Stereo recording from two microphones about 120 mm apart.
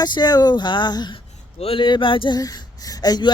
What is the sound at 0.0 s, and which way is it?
Speech, 35° left (ahead or behind).